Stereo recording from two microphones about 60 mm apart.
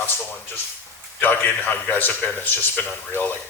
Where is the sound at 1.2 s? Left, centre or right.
Left.